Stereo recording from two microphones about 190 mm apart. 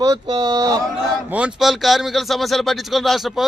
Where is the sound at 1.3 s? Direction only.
5° right (ahead or behind).